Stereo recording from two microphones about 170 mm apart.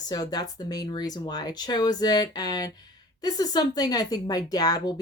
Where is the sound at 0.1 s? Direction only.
25° left (ahead or behind).